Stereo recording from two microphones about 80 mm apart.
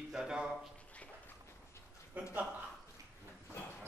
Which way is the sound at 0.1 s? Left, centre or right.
Centre.